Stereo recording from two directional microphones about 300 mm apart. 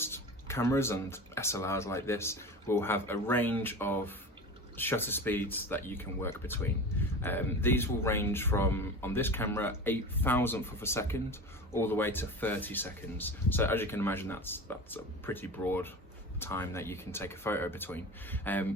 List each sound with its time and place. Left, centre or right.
0.0 s speech: centre